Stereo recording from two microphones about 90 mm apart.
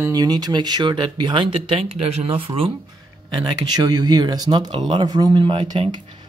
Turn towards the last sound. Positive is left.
turn(degrees=-60)  # may be behind; listen again after turning